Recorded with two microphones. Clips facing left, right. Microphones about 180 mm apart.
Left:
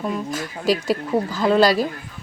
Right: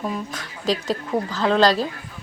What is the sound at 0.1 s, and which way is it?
Speech, 5° left (ahead or behind).